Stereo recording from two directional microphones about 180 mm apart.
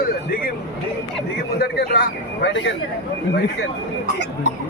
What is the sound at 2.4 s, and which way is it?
Speech, 80° left.